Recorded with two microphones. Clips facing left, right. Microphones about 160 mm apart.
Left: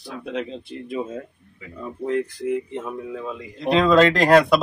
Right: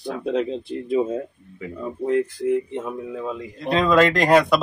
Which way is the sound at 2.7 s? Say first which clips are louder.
Right 1 dB; 10° right (ahead or behind).